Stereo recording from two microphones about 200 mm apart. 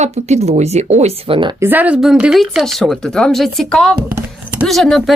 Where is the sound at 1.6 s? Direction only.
10° right (ahead or behind).